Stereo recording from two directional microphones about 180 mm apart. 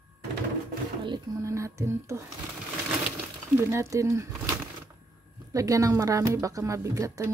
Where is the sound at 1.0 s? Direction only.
20° right (ahead or behind).